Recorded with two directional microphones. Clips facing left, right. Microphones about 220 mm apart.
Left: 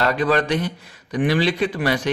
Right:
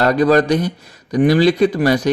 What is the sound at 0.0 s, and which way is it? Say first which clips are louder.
A man's voice: right 6 dB; 40° right (ahead or behind).